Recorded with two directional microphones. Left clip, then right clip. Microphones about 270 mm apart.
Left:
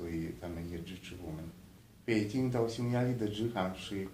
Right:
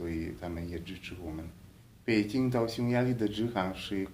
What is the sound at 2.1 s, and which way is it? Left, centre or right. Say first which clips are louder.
A man's voice: right 4 dB; right.